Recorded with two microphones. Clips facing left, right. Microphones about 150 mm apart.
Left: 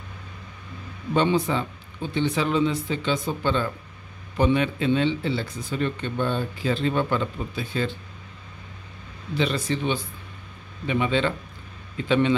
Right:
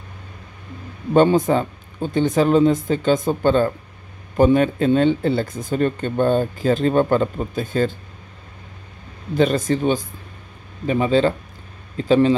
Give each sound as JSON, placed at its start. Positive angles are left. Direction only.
{"t": 1.1, "sound": "speech", "side_deg": -45}
{"t": 9.3, "sound": "speech", "side_deg": -45}